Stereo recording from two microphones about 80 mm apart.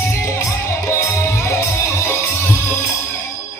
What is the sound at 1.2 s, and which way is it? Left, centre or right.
Music, left.